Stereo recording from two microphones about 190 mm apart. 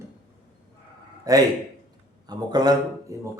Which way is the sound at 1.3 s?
20° right (ahead or behind).